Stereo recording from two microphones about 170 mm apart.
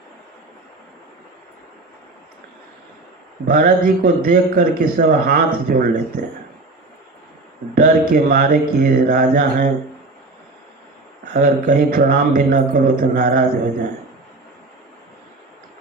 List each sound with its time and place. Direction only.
3.4 s a man's voice: 55° right (ahead or behind)
7.8 s a man's voice: 60° right (ahead or behind)
11.3 s a man's voice: 60° right (ahead or behind)